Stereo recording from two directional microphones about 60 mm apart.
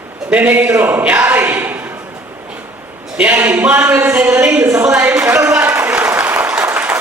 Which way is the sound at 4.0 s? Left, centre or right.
Right.